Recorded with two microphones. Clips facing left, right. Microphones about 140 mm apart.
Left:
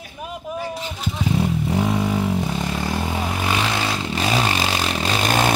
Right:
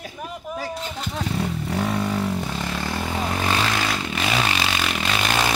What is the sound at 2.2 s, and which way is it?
Vehicle, 5° left (ahead or behind).